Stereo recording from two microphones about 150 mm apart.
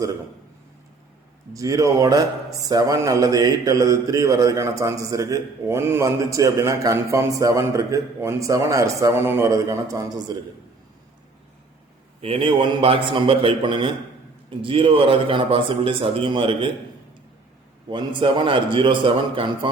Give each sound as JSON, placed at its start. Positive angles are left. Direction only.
{"t": 1.5, "sound": "a man's voice", "side_deg": -20}
{"t": 12.2, "sound": "speech", "side_deg": -35}
{"t": 17.8, "sound": "speech", "side_deg": -30}